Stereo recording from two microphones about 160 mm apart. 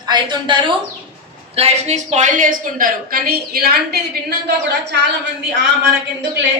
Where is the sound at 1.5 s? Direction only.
40° right (ahead or behind); by 3.7 s 70° right (ahead or behind).